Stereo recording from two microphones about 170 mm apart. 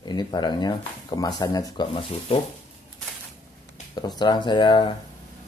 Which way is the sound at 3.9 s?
25° left (ahead or behind).